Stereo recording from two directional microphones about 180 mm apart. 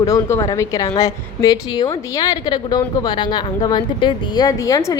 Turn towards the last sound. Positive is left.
turn(degrees=20)  # may be behind; listen again after turning